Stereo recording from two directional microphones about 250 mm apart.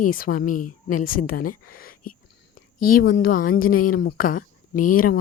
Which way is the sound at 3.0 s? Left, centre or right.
Left.